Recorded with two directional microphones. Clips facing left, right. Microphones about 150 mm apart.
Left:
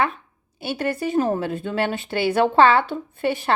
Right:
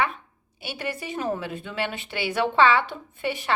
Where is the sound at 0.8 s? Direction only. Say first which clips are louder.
Left 9 dB; 40° left (ahead or behind).